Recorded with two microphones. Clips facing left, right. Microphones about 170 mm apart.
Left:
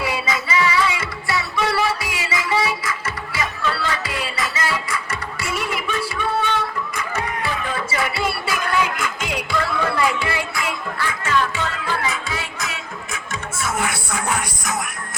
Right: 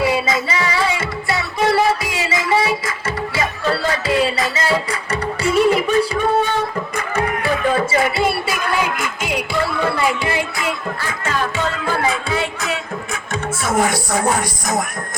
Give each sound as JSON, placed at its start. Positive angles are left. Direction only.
{"t": 0.0, "sound": "music", "side_deg": -25}
{"t": 7.9, "sound": "music", "side_deg": -25}
{"t": 9.0, "sound": "music", "side_deg": -15}
{"t": 9.5, "sound": "music", "side_deg": -30}
{"t": 13.7, "sound": "music", "side_deg": -35}